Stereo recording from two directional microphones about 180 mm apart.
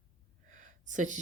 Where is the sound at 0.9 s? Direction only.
45° right (ahead or behind).